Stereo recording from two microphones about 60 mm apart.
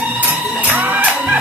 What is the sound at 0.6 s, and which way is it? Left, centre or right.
Music, right.